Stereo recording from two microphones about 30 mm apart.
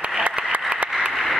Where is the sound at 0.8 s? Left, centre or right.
Right.